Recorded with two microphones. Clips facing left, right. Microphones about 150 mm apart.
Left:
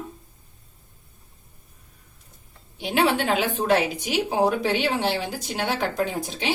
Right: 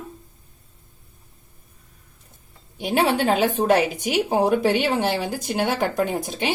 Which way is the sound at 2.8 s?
45° right (ahead or behind).